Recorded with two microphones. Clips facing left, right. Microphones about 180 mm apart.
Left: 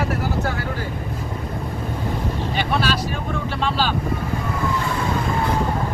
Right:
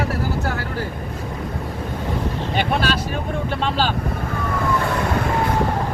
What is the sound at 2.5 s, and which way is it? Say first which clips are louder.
Vehicle: right 2 dB; 50° right (ahead or behind).